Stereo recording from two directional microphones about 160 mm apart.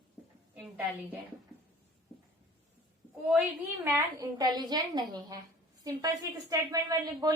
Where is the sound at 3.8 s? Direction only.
20° right (ahead or behind).